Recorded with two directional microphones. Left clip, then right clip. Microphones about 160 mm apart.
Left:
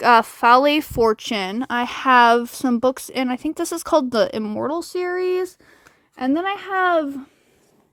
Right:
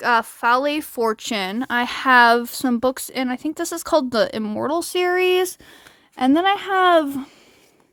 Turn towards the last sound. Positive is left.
turn(degrees=-20)  # may be behind; listen again after turning